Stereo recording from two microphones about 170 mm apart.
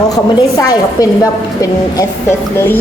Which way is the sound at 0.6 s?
20° left (ahead or behind).